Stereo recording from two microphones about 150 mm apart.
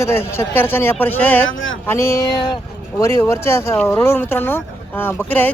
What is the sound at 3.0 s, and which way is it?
Speech, 20° left (ahead or behind).